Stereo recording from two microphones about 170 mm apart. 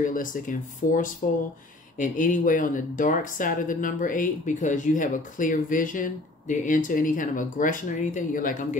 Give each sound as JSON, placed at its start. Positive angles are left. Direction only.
{"t": 0.0, "sound": "speech", "side_deg": 50}